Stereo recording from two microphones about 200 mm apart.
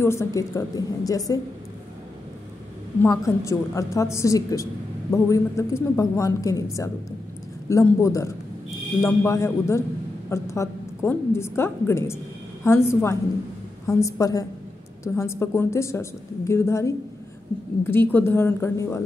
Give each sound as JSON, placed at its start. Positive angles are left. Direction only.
{"t": 0.0, "sound": "a woman's voice", "side_deg": 15}
{"t": 3.0, "sound": "a woman's voice", "side_deg": 15}